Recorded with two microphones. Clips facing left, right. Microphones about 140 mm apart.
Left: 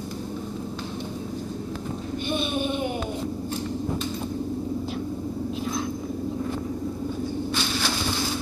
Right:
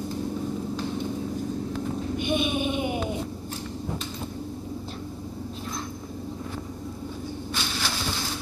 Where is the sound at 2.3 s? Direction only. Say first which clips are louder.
Even; 10° right (ahead or behind).